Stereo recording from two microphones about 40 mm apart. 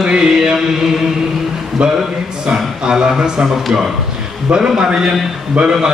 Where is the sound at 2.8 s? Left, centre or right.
Centre.